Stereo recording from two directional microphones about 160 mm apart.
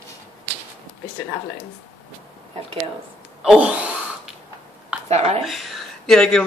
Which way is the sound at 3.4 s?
5° right (ahead or behind).